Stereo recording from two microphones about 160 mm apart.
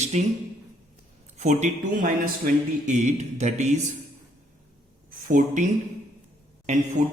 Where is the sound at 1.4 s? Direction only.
50° right (ahead or behind).